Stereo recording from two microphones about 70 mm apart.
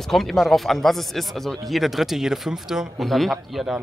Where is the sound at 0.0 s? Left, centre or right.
Centre.